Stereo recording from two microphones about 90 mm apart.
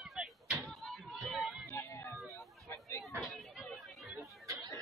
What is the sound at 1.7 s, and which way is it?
Music, 25° left (ahead or behind).